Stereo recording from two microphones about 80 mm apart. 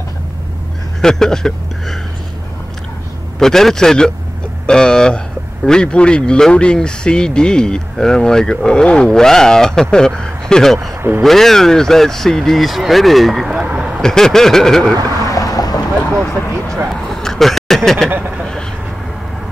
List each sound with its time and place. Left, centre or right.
1.0 s speech: centre
3.3 s speech: centre
11.0 s speech: right
11.2 s speech: centre
13.7 s a sound: centre
14.0 s speech: centre
15.2 s boat: left
16.7 s a sound: centre